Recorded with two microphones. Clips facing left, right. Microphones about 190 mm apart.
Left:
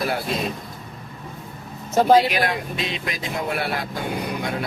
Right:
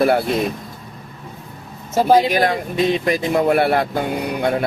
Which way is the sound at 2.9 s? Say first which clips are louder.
Right 11 dB; 55° right (ahead or behind).